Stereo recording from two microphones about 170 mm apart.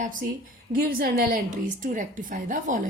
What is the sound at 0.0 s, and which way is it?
A woman's voice, 50° right (ahead or behind).